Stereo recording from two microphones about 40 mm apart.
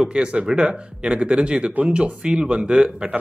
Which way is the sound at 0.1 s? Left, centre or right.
Right.